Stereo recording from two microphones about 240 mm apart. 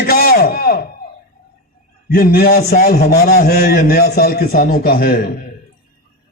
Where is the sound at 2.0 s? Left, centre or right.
Left.